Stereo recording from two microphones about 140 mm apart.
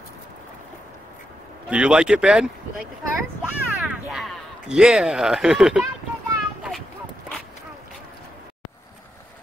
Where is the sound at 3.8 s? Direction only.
5° right (ahead or behind).